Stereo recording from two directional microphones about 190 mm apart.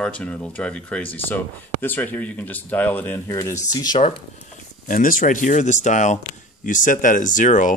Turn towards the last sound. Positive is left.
turn(degrees=40)  # may be behind; listen again after turning